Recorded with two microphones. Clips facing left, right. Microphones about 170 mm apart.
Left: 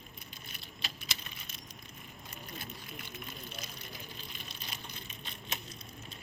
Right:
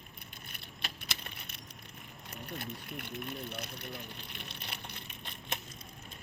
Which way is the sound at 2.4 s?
65° right (ahead or behind).